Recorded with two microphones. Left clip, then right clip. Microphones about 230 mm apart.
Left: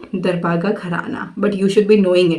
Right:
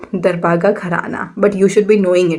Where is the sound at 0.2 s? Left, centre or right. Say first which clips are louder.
Right 6 dB; right.